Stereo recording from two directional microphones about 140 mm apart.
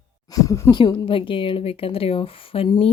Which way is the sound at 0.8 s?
35° left (ahead or behind).